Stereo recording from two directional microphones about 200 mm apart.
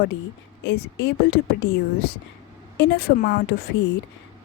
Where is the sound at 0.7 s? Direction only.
60° left (ahead or behind).